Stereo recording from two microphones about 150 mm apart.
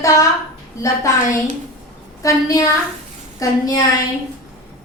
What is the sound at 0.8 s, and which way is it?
A woman's voice, 20° left (ahead or behind).